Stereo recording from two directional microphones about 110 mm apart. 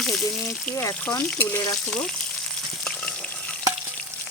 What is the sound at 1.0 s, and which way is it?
Stir, 15° left (ahead or behind).